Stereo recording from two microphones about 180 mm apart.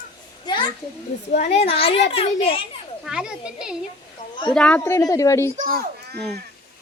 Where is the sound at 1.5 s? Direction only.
30° left (ahead or behind).